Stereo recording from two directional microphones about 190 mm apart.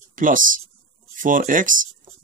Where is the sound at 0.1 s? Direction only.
45° right (ahead or behind).